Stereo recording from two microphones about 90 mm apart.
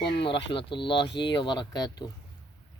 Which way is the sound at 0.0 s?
70° left (ahead or behind).